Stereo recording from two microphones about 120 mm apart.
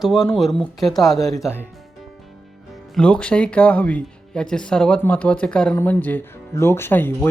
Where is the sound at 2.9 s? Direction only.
10° left (ahead or behind).